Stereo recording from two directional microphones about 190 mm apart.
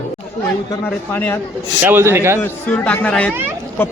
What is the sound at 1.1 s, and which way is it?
Speech, 10° left (ahead or behind).